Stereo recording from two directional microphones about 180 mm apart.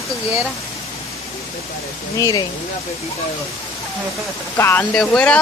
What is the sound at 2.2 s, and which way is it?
Speech, 20° left (ahead or behind).